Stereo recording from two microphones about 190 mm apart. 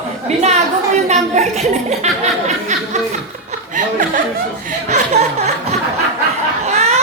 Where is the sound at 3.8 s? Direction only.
45° right (ahead or behind).